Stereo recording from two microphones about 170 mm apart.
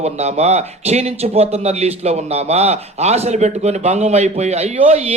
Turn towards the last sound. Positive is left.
turn(degrees=-35)  # may be behind; listen again after turning